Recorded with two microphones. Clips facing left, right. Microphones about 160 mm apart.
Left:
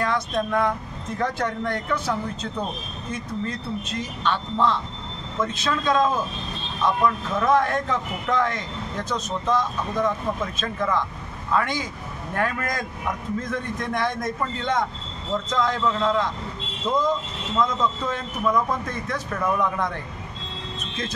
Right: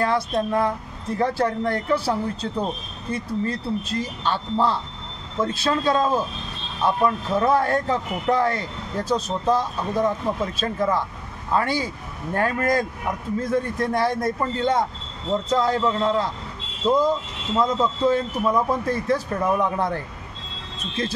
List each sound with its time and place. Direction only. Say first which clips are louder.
0.0 s speech: right 2 dB; 30° right (ahead or behind)
17.6 s speech: right 2 dB; 35° right (ahead or behind)